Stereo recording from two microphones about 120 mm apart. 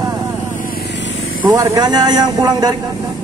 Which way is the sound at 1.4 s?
30° right (ahead or behind).